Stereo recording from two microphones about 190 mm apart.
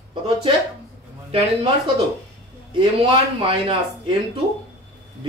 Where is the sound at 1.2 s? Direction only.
30° right (ahead or behind).